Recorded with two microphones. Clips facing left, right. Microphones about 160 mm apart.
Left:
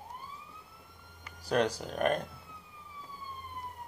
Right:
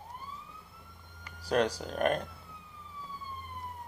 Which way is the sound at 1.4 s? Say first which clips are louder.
Right 1 dB; 35° right (ahead or behind).